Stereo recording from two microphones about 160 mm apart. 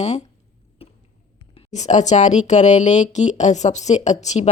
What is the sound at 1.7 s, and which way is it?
Speech, 45° left (ahead or behind).